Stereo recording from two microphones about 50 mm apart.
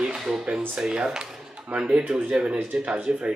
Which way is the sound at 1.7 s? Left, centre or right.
Right.